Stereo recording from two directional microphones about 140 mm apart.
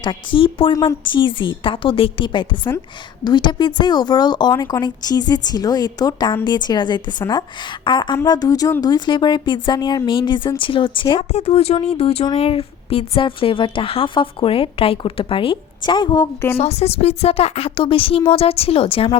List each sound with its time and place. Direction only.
0.0 s speech: 35° left (ahead or behind)
11.2 s speech: 50° left (ahead or behind); by 16.2 s 35° left (ahead or behind)
16.2 s speech: 20° left (ahead or behind)
16.6 s a woman's voice: 50° left (ahead or behind)